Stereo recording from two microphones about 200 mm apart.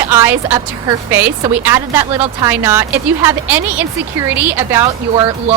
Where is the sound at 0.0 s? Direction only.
10° right (ahead or behind).